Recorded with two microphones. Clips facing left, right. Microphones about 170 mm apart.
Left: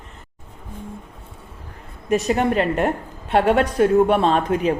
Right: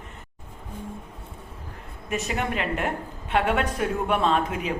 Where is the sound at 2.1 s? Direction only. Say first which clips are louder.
Left 9 dB; 35° left (ahead or behind).